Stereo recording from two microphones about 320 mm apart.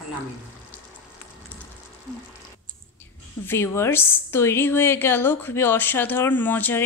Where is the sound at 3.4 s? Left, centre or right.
Centre.